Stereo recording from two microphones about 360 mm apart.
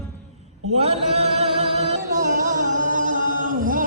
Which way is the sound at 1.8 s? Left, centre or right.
Right.